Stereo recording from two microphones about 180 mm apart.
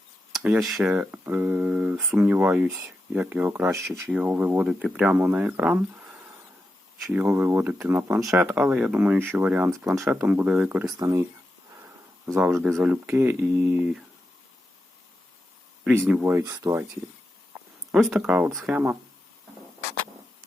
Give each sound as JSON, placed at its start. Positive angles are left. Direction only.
{"t": 0.4, "sound": "speech", "side_deg": -5}
{"t": 15.8, "sound": "speech", "side_deg": -5}
{"t": 16.3, "sound": "speech", "side_deg": -20}
{"t": 17.9, "sound": "speech", "side_deg": -5}